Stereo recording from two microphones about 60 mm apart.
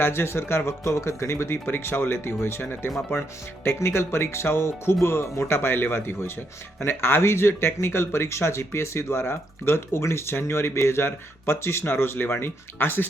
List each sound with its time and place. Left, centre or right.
0.0 s speech: left